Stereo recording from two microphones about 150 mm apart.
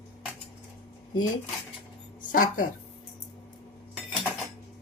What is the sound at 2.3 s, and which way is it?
Speech, 65° left (ahead or behind).